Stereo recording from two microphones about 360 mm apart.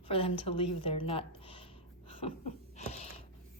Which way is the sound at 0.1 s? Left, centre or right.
Centre.